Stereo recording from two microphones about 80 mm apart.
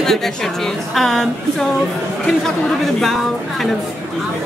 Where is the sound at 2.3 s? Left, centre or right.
Centre.